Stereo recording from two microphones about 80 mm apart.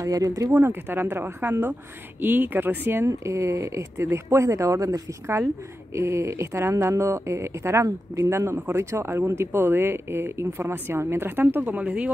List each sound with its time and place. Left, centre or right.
0.0 s speech: right
0.5 s a woman's voice: right
3.1 s a woman's voice: right; by 12.1 s centre